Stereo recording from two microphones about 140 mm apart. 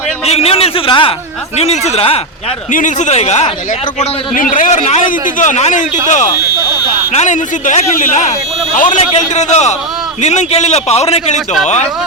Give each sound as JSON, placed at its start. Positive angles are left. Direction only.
{"t": 0.3, "sound": "a man's voice", "side_deg": 45}
{"t": 1.5, "sound": "a man's voice", "side_deg": 50}
{"t": 2.7, "sound": "a man's voice", "side_deg": 60}
{"t": 4.4, "sound": "a man's voice", "side_deg": 70}